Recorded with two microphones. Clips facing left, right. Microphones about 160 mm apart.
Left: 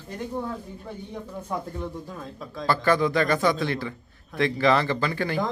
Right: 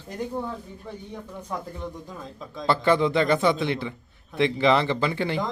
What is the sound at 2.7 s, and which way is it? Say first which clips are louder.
Speech: right 1 dB; 25° right (ahead or behind).